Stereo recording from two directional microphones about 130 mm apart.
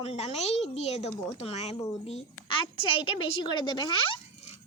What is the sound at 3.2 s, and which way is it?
Speech, 35° left (ahead or behind).